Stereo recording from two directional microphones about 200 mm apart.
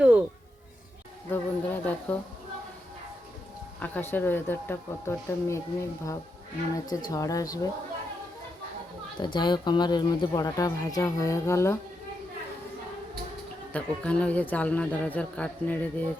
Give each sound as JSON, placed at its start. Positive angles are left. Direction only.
{"t": 0.0, "sound": "a sound", "side_deg": -5}
{"t": 1.3, "sound": "a sound", "side_deg": 10}
{"t": 3.8, "sound": "a man's voice", "side_deg": 5}
{"t": 6.7, "sound": "a man's voice", "side_deg": 20}
{"t": 9.2, "sound": "speech", "side_deg": 20}
{"t": 13.7, "sound": "a man's voice", "side_deg": 5}